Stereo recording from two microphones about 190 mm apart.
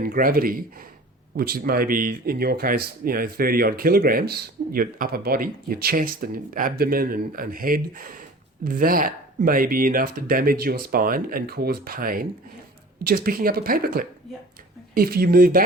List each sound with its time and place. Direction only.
0.0 s speech: 50° right (ahead or behind)